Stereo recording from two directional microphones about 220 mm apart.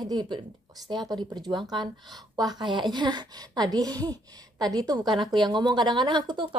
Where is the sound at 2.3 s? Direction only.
20° right (ahead or behind).